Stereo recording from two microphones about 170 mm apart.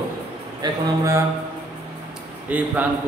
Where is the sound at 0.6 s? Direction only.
20° right (ahead or behind).